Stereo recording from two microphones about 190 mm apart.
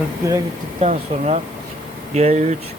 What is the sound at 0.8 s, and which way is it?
Speech, 35° right (ahead or behind).